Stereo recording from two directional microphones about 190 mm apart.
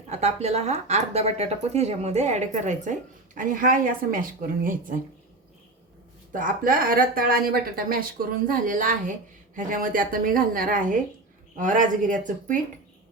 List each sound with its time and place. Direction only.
0.1 s speech: 35° right (ahead or behind)
6.3 s speech: 45° right (ahead or behind)